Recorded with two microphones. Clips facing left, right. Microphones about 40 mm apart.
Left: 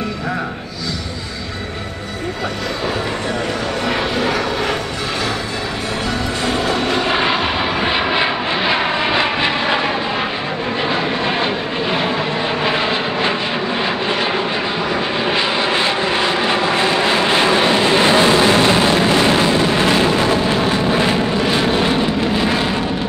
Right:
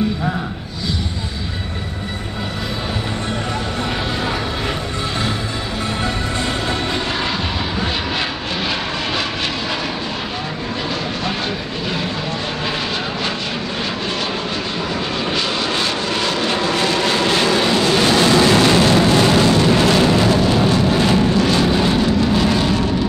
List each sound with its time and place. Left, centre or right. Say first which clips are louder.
6.9 s vehicle: left 5 dB; left
15.2 s vehicle: left 4 dB; left